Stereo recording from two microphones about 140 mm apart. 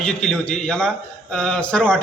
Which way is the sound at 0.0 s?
5° left (ahead or behind).